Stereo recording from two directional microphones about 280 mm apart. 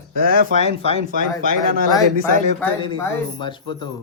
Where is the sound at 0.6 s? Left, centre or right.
Left.